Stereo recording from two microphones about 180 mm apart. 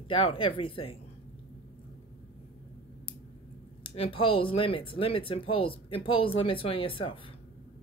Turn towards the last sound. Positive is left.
turn(degrees=30)  # may be behind; listen again after turning